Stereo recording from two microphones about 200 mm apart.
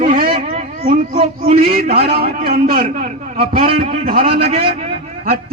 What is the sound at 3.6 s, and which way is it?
A child's voice, 30° right (ahead or behind).